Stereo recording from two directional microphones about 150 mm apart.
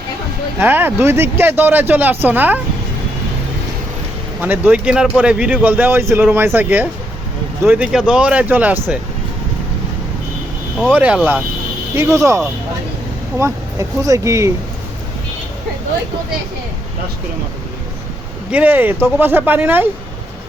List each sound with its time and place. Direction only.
0.6 s speech: 15° right (ahead or behind)
4.4 s speech: 10° right (ahead or behind)
10.9 s speech: 10° right (ahead or behind)
11.9 s speech: 20° right (ahead or behind)
13.4 s speech: 20° right (ahead or behind)
18.5 s speech: 10° right (ahead or behind)